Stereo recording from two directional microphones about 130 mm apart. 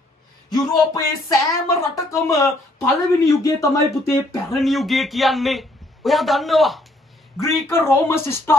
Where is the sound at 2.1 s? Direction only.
25° left (ahead or behind).